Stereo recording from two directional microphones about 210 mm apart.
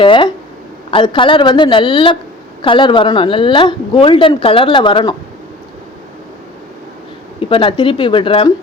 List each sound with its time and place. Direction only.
0.0 s speech: 25° left (ahead or behind)
7.3 s speech: 25° left (ahead or behind)